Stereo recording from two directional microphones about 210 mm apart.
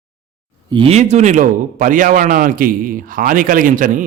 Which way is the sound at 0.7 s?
25° right (ahead or behind).